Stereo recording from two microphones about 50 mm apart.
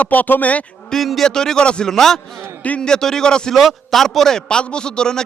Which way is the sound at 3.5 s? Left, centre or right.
Centre.